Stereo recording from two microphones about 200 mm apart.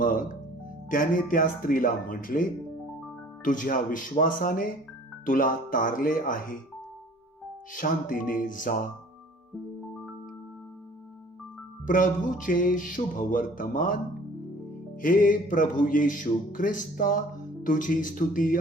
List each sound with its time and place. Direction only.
0.0 s music: 45° left (ahead or behind)
0.9 s speech: 45° left (ahead or behind)
7.7 s speech: 40° left (ahead or behind)
11.9 s speech: 40° left (ahead or behind)
15.0 s speech: 45° left (ahead or behind)